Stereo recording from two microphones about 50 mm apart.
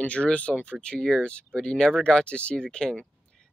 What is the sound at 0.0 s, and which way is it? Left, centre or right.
Speech, left.